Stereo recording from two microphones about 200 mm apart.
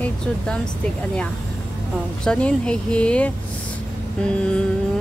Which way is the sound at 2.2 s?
5° left (ahead or behind).